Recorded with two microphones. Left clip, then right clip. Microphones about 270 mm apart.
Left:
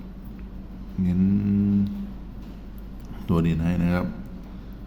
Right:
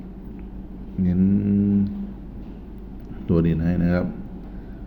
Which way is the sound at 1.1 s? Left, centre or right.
Centre.